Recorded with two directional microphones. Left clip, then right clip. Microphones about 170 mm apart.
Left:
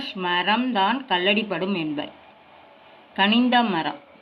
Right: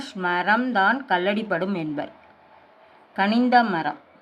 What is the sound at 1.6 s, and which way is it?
Speech, 50° right (ahead or behind).